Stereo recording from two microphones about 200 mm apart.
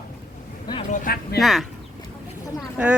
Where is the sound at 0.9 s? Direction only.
50° left (ahead or behind).